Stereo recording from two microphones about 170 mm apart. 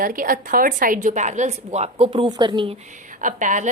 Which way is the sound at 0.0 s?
55° right (ahead or behind).